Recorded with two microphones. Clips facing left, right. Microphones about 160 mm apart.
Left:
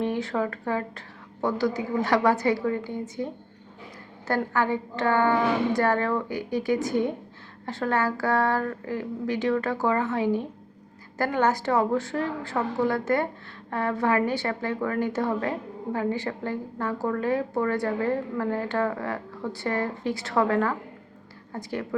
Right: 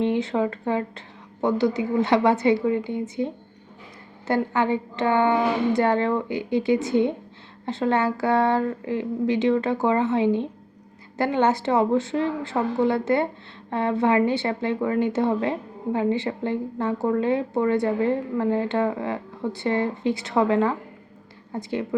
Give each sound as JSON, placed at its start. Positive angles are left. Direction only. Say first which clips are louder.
{"t": 0.0, "sound": "a woman's voice", "louder": "right 4 dB", "side_deg": -20}
{"t": 4.5, "sound": "a woman's voice", "louder": "right 3 dB", "side_deg": -20}